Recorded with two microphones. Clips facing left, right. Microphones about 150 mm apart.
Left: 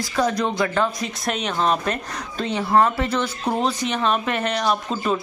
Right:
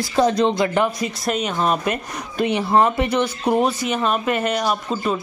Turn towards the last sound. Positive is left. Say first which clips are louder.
# even
turn(degrees=-5)  # may be behind; listen again after turning